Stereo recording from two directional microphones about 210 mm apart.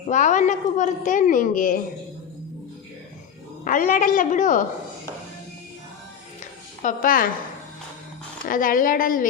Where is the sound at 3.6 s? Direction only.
40° left (ahead or behind).